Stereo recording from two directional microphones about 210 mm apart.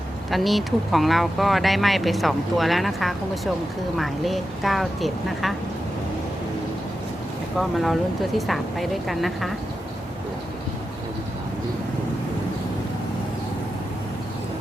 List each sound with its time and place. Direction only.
0.3 s speech: centre (ahead or behind)
7.6 s speech: centre (ahead or behind)